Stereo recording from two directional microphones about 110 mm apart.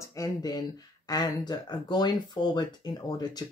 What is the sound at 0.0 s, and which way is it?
Speech, 30° left (ahead or behind).